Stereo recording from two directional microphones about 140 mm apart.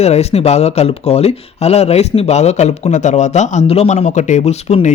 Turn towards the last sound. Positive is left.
turn(degrees=50)  # may be behind; listen again after turning